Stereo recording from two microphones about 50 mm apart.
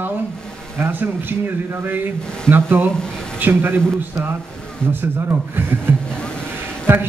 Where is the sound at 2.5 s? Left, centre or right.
Right.